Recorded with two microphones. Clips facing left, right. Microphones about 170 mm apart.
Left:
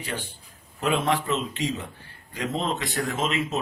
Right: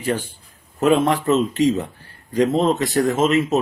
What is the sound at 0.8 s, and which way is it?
Speech, 45° right (ahead or behind).